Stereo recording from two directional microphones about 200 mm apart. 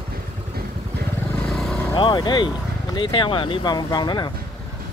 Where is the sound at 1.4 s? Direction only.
5° left (ahead or behind).